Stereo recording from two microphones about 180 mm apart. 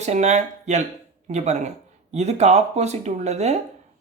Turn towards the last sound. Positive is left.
turn(degrees=-40)  # may be behind; listen again after turning